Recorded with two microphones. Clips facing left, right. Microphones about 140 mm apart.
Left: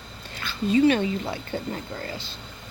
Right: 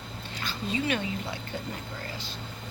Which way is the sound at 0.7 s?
35° left (ahead or behind).